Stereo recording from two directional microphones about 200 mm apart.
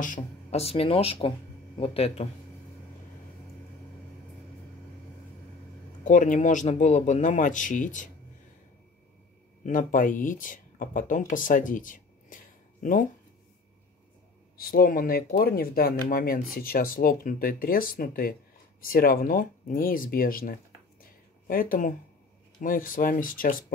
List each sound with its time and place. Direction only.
0.0 s speech: 35° left (ahead or behind)
6.0 s speech: 40° left (ahead or behind)
9.6 s speech: 40° left (ahead or behind)
14.6 s speech: 45° left (ahead or behind)